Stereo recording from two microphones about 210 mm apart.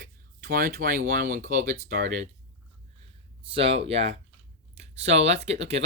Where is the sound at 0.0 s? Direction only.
45° right (ahead or behind).